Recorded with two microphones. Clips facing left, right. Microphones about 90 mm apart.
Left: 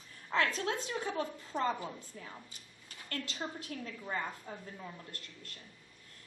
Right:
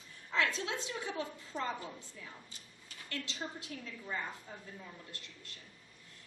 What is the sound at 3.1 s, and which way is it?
A woman's voice, 45° left (ahead or behind).